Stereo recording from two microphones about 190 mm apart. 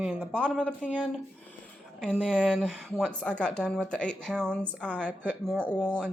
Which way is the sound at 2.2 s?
5° left (ahead or behind).